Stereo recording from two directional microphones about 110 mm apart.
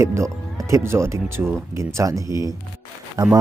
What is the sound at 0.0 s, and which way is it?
Speech, 25° right (ahead or behind).